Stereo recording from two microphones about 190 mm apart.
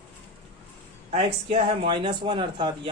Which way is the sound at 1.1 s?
30° right (ahead or behind).